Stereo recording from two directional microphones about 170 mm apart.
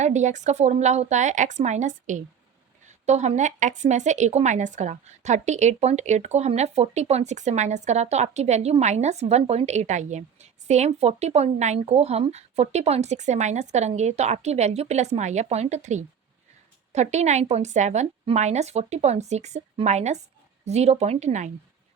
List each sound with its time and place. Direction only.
0.0 s a woman's voice: 45° right (ahead or behind)